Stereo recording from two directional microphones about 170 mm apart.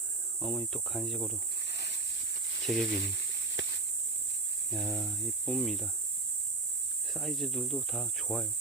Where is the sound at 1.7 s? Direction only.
85° left.